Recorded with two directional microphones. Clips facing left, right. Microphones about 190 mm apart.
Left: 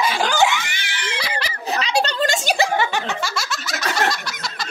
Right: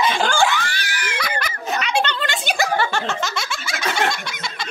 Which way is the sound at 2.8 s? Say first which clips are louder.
Even; 15° left (ahead or behind).